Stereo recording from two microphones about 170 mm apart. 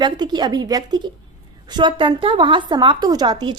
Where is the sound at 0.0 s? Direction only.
25° right (ahead or behind).